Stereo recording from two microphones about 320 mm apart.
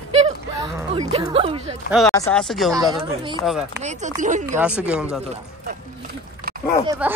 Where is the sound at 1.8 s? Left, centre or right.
Centre.